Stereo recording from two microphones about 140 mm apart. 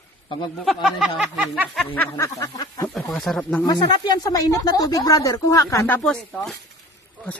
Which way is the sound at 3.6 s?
30° left (ahead or behind).